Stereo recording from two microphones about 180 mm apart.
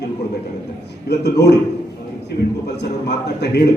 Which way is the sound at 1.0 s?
70° left (ahead or behind).